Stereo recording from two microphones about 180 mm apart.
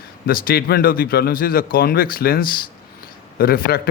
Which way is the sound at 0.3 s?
55° left (ahead or behind).